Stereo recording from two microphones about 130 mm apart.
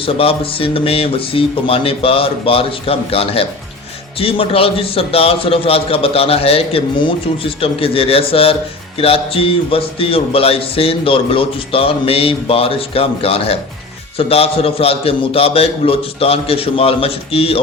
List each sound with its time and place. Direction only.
0.0 s speech: 45° left (ahead or behind)